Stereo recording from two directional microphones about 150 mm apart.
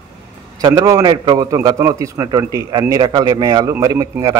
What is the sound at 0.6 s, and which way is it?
A man's voice, 25° right (ahead or behind).